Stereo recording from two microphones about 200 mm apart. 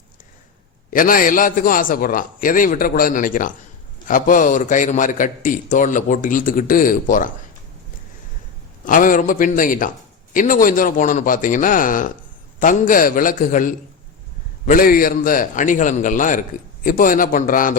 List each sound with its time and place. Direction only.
0.9 s a man's voice: 45° left (ahead or behind)
8.8 s a man's voice: 40° left (ahead or behind)